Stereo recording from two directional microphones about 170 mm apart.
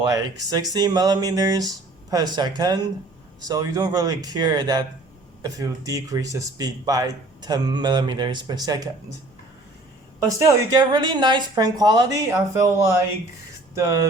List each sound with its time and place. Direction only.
0.1 s speech: 20° right (ahead or behind)
10.2 s speech: 20° right (ahead or behind)